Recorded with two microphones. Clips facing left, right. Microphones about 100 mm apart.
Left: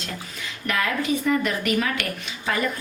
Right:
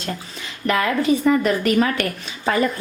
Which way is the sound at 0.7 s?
35° right (ahead or behind).